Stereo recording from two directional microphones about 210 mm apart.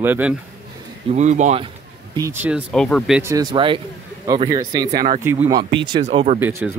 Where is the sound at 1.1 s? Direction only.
35° right (ahead or behind).